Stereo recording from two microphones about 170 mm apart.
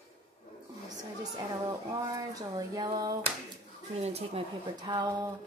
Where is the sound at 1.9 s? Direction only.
20° right (ahead or behind).